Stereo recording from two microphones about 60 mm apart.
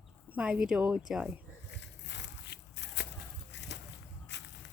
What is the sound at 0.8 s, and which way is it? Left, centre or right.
Speech, right.